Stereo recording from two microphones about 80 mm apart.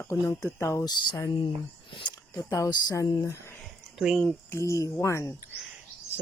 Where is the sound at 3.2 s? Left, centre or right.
Left.